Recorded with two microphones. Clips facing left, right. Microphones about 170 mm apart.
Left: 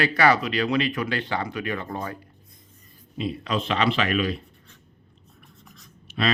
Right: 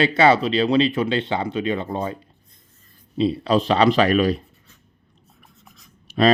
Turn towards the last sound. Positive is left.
turn(degrees=-40)  # may be behind; listen again after turning